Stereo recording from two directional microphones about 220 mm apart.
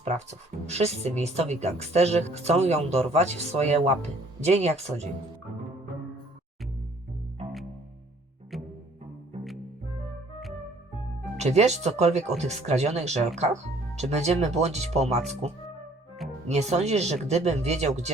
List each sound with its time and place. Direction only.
0.0 s speech: 30° right (ahead or behind)
8.5 s music: centre (ahead or behind)
11.3 s speech: 30° right (ahead or behind)